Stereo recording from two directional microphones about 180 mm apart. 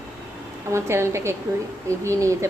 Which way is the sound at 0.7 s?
15° right (ahead or behind).